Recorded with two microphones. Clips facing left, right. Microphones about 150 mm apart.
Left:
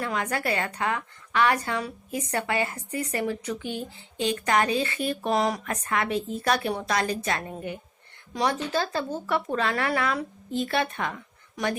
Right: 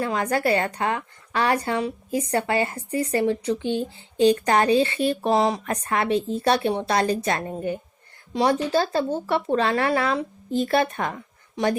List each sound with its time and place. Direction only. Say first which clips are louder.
0.0 s a woman's voice: right 5 dB; 35° right (ahead or behind)